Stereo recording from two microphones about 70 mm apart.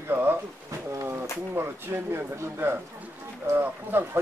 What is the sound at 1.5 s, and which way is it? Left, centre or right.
Speech, right.